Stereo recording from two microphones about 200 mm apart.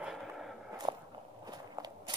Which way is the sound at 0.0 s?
Centre (ahead or behind).